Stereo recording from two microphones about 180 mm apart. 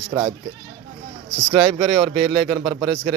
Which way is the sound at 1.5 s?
30° right (ahead or behind).